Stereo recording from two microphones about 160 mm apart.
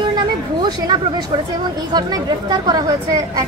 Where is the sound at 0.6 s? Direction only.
25° right (ahead or behind).